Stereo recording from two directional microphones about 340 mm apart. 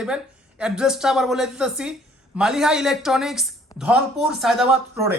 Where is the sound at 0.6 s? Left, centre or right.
Centre.